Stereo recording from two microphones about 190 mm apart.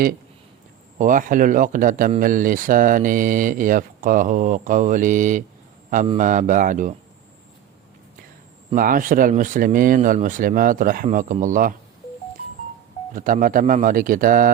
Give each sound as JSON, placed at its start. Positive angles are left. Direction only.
{"t": 0.9, "sound": "speech", "side_deg": -45}
{"t": 8.7, "sound": "speech", "side_deg": -45}
{"t": 13.1, "sound": "speech", "side_deg": -45}